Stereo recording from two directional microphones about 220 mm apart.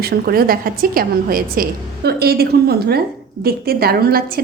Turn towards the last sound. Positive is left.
turn(degrees=-45)  # may be behind; listen again after turning